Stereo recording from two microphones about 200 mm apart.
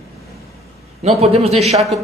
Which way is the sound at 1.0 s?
30° right (ahead or behind).